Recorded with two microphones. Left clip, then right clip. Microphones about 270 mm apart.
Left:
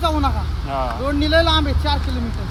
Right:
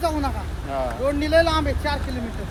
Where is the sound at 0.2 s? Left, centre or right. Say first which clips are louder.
Left 5 dB; centre.